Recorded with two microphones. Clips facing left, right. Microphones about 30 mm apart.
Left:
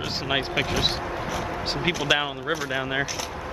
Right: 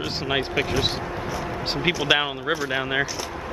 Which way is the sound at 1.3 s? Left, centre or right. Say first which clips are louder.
Right 1 dB; centre.